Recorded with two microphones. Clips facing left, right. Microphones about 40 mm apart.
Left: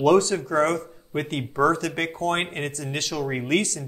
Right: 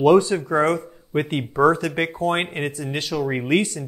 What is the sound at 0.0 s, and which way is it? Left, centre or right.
Speech, centre.